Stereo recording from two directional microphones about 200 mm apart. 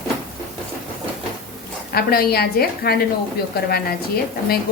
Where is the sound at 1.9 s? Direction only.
50° left (ahead or behind).